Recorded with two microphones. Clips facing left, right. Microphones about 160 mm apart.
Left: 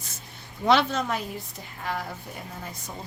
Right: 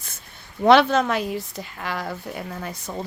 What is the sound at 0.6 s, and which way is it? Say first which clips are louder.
A woman's voice: right 7 dB; 65° right (ahead or behind).